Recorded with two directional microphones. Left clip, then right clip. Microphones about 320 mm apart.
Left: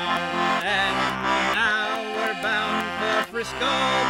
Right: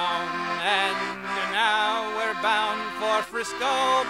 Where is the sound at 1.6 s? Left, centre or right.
Left.